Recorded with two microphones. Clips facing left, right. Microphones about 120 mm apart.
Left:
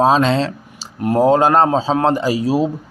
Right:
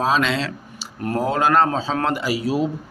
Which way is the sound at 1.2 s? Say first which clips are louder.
Left 5 dB; 30° left (ahead or behind).